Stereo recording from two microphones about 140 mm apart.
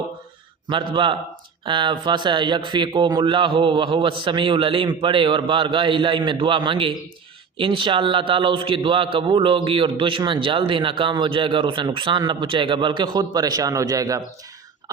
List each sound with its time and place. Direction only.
1.0 s a man's voice: 35° right (ahead or behind)